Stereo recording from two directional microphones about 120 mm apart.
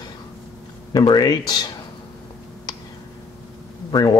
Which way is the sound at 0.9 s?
35° left (ahead or behind).